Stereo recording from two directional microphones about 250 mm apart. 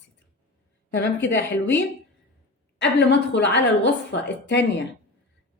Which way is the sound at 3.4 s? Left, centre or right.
Left.